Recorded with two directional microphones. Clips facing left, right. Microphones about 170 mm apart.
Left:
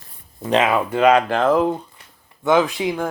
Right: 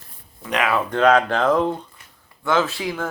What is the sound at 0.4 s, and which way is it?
Speech, 30° left (ahead or behind).